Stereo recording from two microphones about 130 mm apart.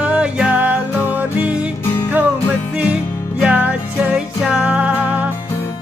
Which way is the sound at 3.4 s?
10° right (ahead or behind).